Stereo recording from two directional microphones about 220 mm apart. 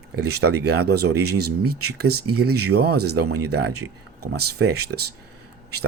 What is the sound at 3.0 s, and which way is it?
Speech, 90° right.